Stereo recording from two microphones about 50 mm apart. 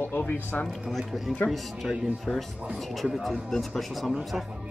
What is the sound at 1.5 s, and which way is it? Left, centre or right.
Speech, centre.